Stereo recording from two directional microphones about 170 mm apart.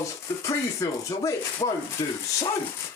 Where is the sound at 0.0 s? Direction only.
20° left (ahead or behind).